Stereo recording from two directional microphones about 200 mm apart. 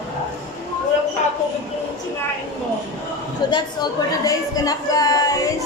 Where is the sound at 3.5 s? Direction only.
20° left (ahead or behind).